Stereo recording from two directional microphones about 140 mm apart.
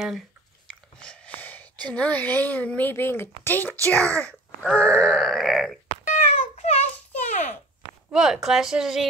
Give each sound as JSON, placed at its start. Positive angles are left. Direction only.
{"t": 0.7, "sound": "a woman's voice", "side_deg": 5}
{"t": 4.6, "sound": "groan", "side_deg": 10}
{"t": 6.0, "sound": "a sound", "side_deg": 65}
{"t": 8.1, "sound": "groan", "side_deg": -5}